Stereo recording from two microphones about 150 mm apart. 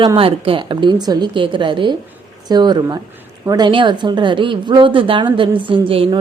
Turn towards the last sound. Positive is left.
turn(degrees=-35)  # may be behind; listen again after turning